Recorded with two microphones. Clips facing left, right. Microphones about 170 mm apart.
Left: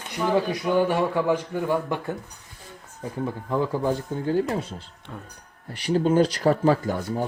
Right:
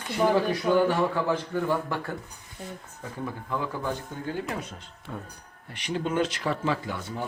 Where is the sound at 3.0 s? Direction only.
30° left (ahead or behind).